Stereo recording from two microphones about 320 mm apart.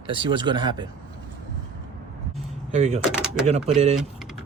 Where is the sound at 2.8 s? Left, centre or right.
Right.